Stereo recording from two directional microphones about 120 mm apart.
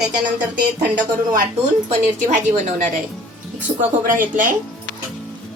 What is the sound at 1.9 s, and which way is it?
A woman's voice, 90° right.